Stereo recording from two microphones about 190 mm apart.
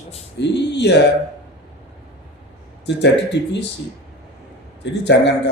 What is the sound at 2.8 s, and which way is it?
Speech, 65° left (ahead or behind).